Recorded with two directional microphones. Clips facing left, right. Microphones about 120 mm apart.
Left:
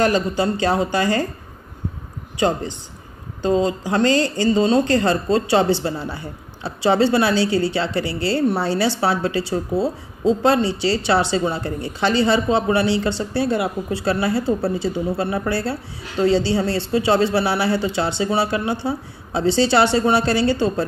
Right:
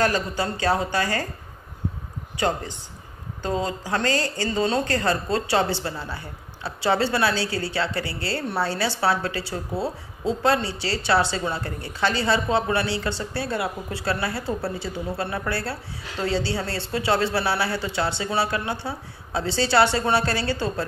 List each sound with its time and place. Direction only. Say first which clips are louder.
0.0 s a woman's voice: left 5 dB; 25° left (ahead or behind)
3.4 s a woman's voice: left 7 dB; 20° left (ahead or behind)